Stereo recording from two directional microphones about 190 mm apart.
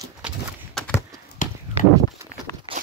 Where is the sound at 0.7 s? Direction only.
5° left (ahead or behind).